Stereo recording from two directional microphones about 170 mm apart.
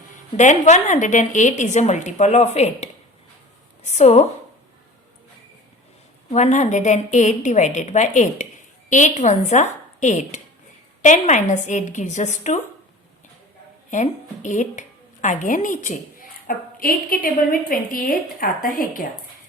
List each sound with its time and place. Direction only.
0.3 s a woman's voice: 45° left (ahead or behind)
6.3 s a woman's voice: 45° left (ahead or behind)
13.9 s a woman's voice: 45° left (ahead or behind)